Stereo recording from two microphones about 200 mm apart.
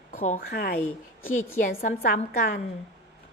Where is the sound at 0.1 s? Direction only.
35° left (ahead or behind).